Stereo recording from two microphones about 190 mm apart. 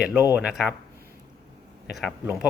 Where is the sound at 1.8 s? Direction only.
5° right (ahead or behind).